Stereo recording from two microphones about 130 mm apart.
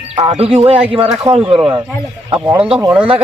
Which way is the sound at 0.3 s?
50° right (ahead or behind).